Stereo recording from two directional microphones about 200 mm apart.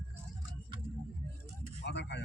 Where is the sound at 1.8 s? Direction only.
60° left (ahead or behind).